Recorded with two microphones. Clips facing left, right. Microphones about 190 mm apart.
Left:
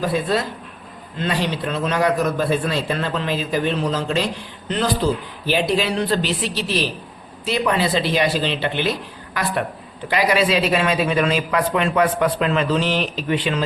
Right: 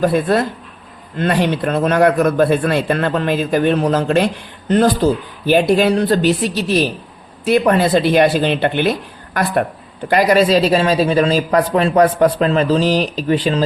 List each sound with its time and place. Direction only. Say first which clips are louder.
0.0 s a man's voice: right 6 dB; 55° right (ahead or behind)
4.7 s speech: right 7 dB; 45° right (ahead or behind)